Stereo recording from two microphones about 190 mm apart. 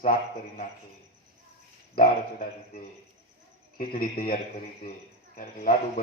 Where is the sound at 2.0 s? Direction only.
50° left (ahead or behind).